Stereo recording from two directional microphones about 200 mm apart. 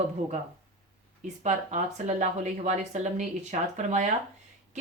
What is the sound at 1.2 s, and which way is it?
Speech, 35° right (ahead or behind).